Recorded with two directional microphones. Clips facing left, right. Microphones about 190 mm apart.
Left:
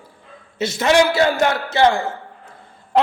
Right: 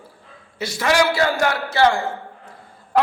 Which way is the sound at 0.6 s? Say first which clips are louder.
Left 3 dB; 20° left (ahead or behind).